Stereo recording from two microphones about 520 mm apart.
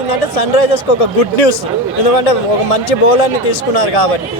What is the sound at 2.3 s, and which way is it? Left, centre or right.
Speech, left.